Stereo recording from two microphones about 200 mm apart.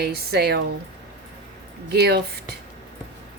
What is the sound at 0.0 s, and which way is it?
Speech, 55° right (ahead or behind).